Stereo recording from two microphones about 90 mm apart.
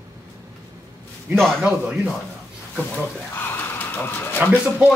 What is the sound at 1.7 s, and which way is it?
Speech, 10° right (ahead or behind).